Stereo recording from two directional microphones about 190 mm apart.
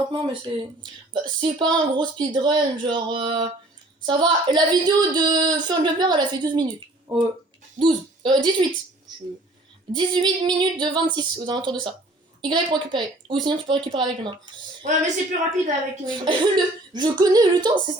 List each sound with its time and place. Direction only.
0.1 s speech: 25° right (ahead or behind)
9.9 s speech: 25° right (ahead or behind)
14.8 s a woman's voice: 40° right (ahead or behind)
16.0 s speech: 25° right (ahead or behind)